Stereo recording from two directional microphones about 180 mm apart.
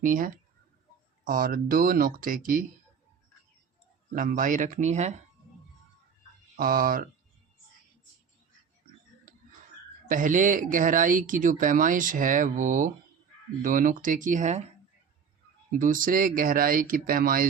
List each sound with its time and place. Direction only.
0.0 s speech: 50° right (ahead or behind)
4.1 s speech: 50° right (ahead or behind)
6.6 s speech: 50° right (ahead or behind)
9.3 s a sound: 50° right (ahead or behind)
10.1 s speech: 45° right (ahead or behind)
15.8 s speech: 50° right (ahead or behind)